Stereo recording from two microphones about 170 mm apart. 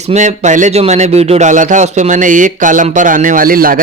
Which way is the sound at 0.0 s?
40° right (ahead or behind).